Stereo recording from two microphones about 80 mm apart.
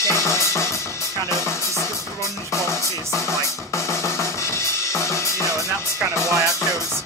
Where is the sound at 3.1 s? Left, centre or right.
Left.